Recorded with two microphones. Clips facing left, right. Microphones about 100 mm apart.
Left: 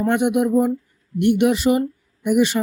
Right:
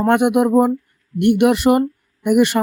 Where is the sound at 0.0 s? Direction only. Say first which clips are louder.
Right 4 dB; 60° right (ahead or behind).